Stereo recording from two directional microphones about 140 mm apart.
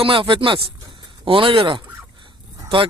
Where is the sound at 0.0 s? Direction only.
35° right (ahead or behind).